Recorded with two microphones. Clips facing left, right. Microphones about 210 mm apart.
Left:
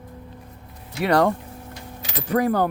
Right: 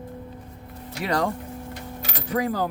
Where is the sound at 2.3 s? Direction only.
60° left (ahead or behind).